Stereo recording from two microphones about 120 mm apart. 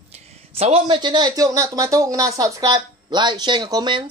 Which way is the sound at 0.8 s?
40° right (ahead or behind).